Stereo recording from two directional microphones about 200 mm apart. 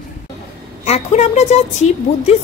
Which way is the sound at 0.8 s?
35° left (ahead or behind).